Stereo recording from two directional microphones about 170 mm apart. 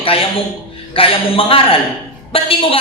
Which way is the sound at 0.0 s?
35° left (ahead or behind).